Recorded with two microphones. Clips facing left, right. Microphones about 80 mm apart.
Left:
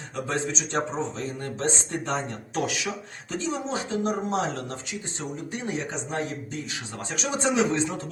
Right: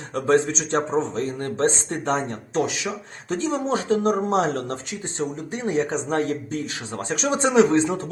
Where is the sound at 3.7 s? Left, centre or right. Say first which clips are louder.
Right 9 dB; right.